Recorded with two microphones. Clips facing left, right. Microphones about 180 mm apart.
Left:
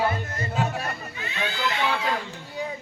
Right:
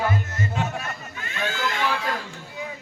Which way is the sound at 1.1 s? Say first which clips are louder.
Right 1 dB; 45° right (ahead or behind).